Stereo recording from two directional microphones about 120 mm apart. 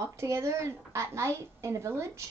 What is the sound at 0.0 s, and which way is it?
Speech, 25° right (ahead or behind).